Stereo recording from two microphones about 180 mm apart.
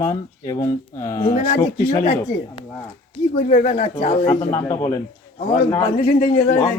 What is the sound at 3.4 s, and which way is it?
Speech, 45° left (ahead or behind).